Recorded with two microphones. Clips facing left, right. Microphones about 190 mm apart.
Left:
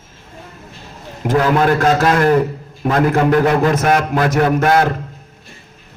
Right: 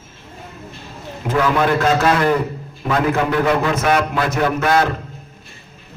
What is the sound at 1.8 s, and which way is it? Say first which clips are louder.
A man's voice: left 2 dB; 45° left (ahead or behind).